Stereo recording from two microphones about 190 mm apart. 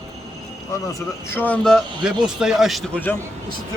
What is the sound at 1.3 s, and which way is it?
A man's voice, 10° left (ahead or behind).